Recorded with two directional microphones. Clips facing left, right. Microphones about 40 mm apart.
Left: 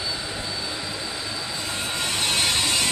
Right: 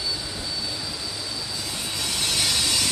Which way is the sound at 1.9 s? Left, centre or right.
Left.